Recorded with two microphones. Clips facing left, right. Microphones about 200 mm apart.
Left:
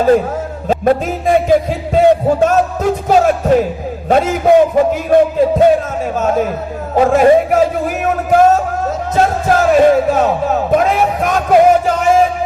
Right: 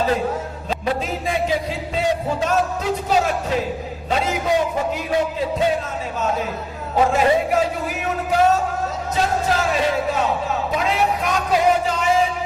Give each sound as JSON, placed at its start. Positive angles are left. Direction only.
{"t": 0.7, "sound": "music", "side_deg": 50}
{"t": 6.9, "sound": "speech", "side_deg": 50}